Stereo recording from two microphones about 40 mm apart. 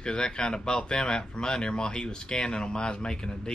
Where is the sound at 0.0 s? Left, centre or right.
Left.